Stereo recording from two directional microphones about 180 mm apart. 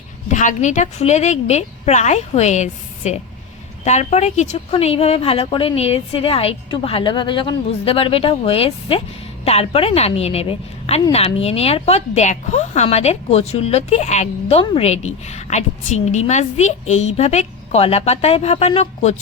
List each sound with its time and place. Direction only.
0.3 s a woman's voice: 45° left (ahead or behind)